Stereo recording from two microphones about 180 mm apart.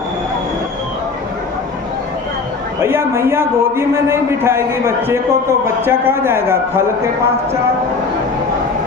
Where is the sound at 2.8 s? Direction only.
15° right (ahead or behind).